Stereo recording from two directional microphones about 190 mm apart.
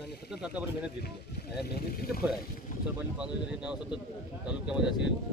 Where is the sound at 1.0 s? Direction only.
55° left (ahead or behind).